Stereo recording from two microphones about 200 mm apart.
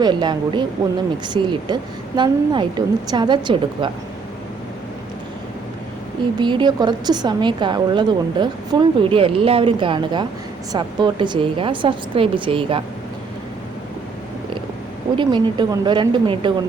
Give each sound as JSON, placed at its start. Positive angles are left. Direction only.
{"t": 0.0, "sound": "a woman's voice", "side_deg": -20}
{"t": 6.4, "sound": "a woman's voice", "side_deg": -20}
{"t": 15.1, "sound": "a woman's voice", "side_deg": -25}